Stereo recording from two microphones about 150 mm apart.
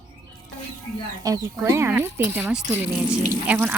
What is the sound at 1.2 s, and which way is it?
Speech, 25° right (ahead or behind).